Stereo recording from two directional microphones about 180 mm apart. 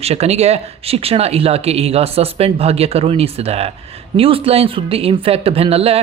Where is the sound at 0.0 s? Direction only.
35° right (ahead or behind).